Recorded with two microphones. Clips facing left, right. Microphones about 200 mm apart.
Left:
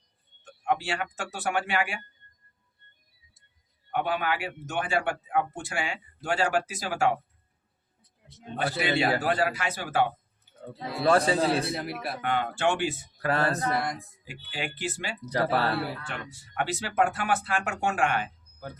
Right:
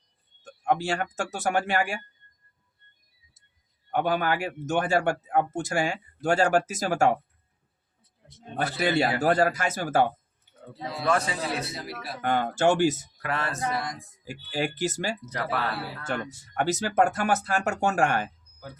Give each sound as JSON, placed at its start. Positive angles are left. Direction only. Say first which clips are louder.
{"t": 0.4, "sound": "a man's voice", "louder": "right 3 dB", "side_deg": -40}
{"t": 3.9, "sound": "a man's voice", "louder": "right 3 dB", "side_deg": -40}
{"t": 8.5, "sound": "a man's voice", "louder": "right 2 dB", "side_deg": -45}
{"t": 11.1, "sound": "a man's voice", "louder": "left 5 dB", "side_deg": 30}
{"t": 11.6, "sound": "speech", "louder": "left 4 dB", "side_deg": 55}
{"t": 12.2, "sound": "speech", "louder": "right 4 dB", "side_deg": -40}
{"t": 13.2, "sound": "a man's voice", "louder": "left 5 dB", "side_deg": 35}
{"t": 14.3, "sound": "a man's voice", "louder": "right 7 dB", "side_deg": -40}
{"t": 15.3, "sound": "a man's voice", "louder": "left 9 dB", "side_deg": 30}
{"t": 16.0, "sound": "a man's voice", "louder": "right 7 dB", "side_deg": -45}